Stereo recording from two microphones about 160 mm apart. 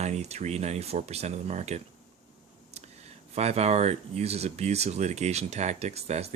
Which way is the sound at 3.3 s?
40° right (ahead or behind).